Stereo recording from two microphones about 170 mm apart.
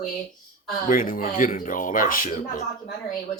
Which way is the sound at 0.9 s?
55° left (ahead or behind).